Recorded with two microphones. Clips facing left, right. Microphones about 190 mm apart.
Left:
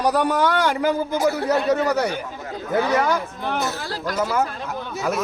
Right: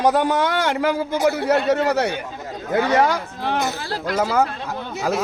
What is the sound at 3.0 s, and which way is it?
Speech, 75° right (ahead or behind).